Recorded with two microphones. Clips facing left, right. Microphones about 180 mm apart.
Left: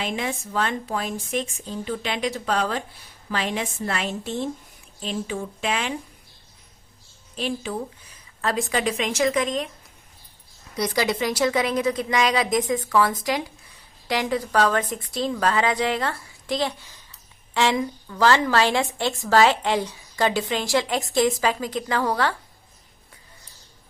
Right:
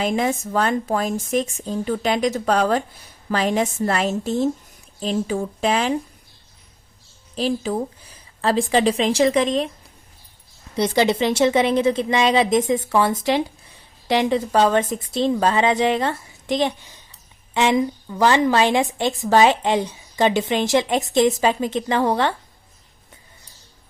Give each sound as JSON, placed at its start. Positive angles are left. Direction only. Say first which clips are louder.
{"t": 0.0, "sound": "a woman's voice", "louder": "right 7 dB", "side_deg": -45}
{"t": 7.3, "sound": "a woman's voice", "louder": "right 6 dB", "side_deg": -35}
{"t": 10.8, "sound": "a woman's voice", "louder": "right 5 dB", "side_deg": -25}